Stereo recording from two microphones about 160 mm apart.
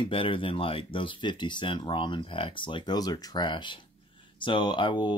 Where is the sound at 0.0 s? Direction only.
35° left (ahead or behind).